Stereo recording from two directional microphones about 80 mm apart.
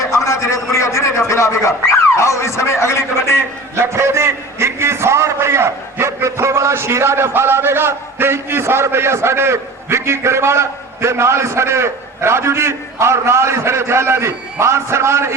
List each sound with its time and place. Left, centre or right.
0.1 s a sound: left
2.2 s a man's voice: left
3.9 s a man's voice: right